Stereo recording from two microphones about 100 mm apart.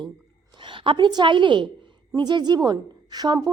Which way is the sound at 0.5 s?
55° right (ahead or behind).